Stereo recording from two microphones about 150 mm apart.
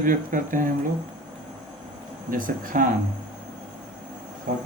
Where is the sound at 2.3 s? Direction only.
65° right (ahead or behind).